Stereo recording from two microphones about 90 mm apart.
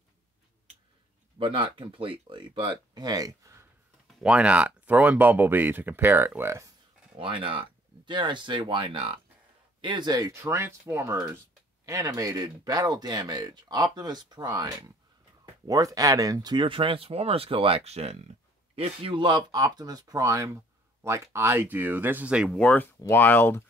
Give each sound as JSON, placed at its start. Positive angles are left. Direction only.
{"t": 1.4, "sound": "speech", "side_deg": -70}
{"t": 4.2, "sound": "speech", "side_deg": -10}
{"t": 7.2, "sound": "speech", "side_deg": -80}
{"t": 9.8, "sound": "speech", "side_deg": -60}
{"t": 10.3, "sound": "speech", "side_deg": -30}
{"t": 16.5, "sound": "speech", "side_deg": -75}
{"t": 18.8, "sound": "speech", "side_deg": -75}
{"t": 22.6, "sound": "speech", "side_deg": 10}
{"t": 23.0, "sound": "speech", "side_deg": 25}